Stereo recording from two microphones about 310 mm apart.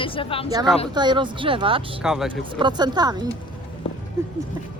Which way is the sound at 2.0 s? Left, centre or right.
Centre.